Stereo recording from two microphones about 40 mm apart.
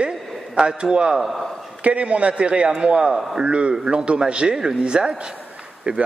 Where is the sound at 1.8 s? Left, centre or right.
Right.